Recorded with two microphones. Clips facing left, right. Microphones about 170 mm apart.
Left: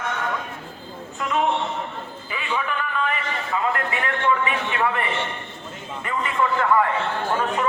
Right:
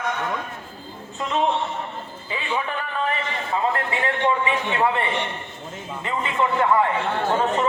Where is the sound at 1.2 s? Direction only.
25° right (ahead or behind).